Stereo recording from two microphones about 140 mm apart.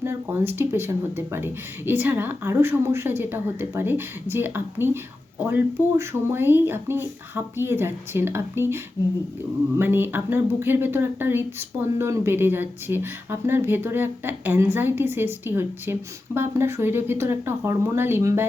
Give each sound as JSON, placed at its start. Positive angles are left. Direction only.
{"t": 0.0, "sound": "speech", "side_deg": -15}